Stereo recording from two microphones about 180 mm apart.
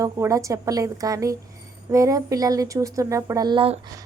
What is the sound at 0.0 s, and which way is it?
A woman's voice, 20° right (ahead or behind).